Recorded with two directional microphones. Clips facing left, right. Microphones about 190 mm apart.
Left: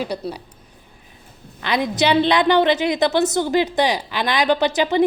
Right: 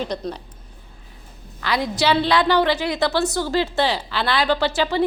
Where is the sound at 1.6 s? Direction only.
20° left (ahead or behind).